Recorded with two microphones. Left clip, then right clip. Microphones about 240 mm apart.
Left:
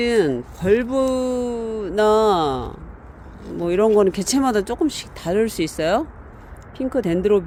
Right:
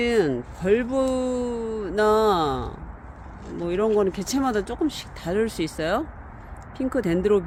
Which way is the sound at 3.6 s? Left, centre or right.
Left.